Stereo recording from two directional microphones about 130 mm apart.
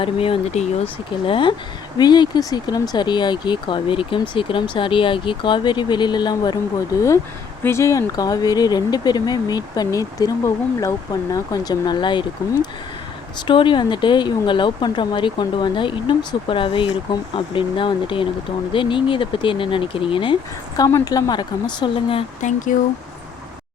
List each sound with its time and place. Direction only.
0.0 s speech: 45° left (ahead or behind)
1.2 s speech: 40° left (ahead or behind)
13.5 s speech: 40° left (ahead or behind)
22.4 s speech: 70° left (ahead or behind)